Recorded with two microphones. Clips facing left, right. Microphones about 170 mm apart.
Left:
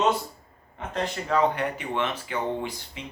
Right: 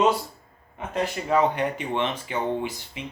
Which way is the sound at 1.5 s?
25° right (ahead or behind).